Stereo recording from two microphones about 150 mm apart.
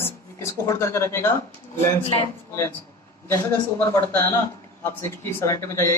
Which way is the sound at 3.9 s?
15° left (ahead or behind).